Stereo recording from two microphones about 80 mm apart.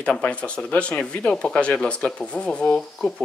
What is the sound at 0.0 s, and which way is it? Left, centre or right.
Speech, centre.